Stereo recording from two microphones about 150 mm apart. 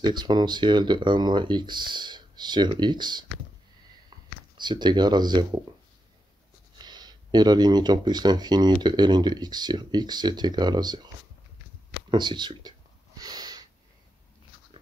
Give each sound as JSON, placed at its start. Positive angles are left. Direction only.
{"t": 0.0, "sound": "speech", "side_deg": -30}
{"t": 4.6, "sound": "speech", "side_deg": -30}
{"t": 6.8, "sound": "speech", "side_deg": -30}
{"t": 12.1, "sound": "speech", "side_deg": -30}
{"t": 13.2, "sound": "a sound", "side_deg": -25}